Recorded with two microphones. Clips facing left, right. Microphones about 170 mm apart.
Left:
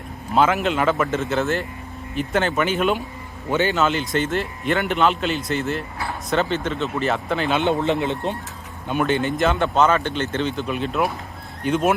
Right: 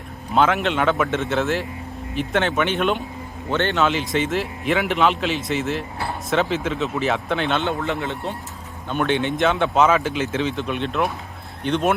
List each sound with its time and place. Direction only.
0.3 s a man's voice: centre (ahead or behind)
7.6 s speech: 20° left (ahead or behind)
8.9 s a man's voice: centre (ahead or behind)